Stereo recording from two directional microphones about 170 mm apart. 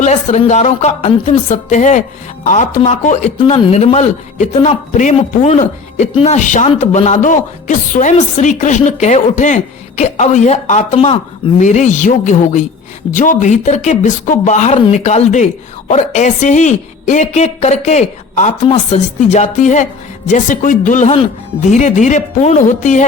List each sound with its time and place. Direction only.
0.0 s a man's voice: 45° left (ahead or behind)
3.3 s a man's voice: 35° left (ahead or behind)